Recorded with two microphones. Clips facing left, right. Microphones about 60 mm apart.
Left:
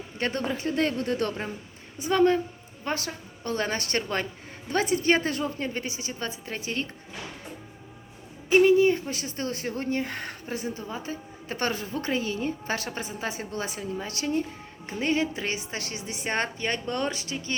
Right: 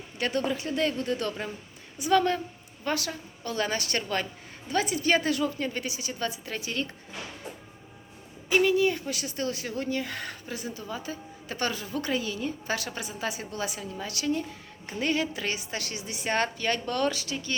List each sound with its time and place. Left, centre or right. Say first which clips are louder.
0.2 s speech: even; left
2.0 s a woman's voice: left 2 dB; left
8.4 s a woman's voice: left 4 dB; left